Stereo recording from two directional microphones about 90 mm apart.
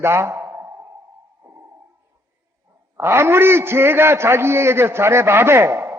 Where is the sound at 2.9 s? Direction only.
30° right (ahead or behind).